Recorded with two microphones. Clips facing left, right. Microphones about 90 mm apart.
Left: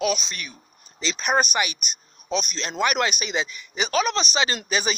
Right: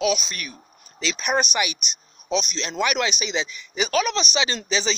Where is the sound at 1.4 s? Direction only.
40° left (ahead or behind).